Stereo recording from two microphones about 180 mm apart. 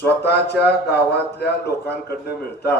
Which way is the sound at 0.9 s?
65° left (ahead or behind).